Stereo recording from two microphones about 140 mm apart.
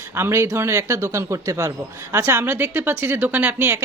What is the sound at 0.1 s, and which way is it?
A woman's voice, 20° right (ahead or behind).